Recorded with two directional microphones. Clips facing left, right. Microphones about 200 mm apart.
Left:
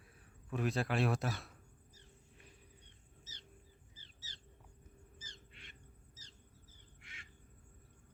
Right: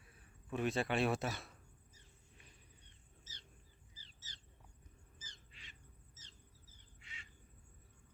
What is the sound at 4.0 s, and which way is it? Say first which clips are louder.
Bird: left 2 dB; 55° left (ahead or behind).